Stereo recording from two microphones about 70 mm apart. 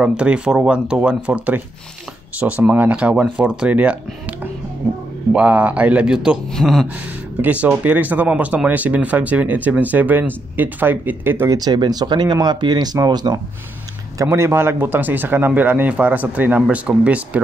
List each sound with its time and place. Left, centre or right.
0.0 s speech: centre
5.3 s speech: centre
6.5 s speech: centre
7.4 s speech: right
11.4 s speech: right
14.1 s speech: right; by 17.4 s centre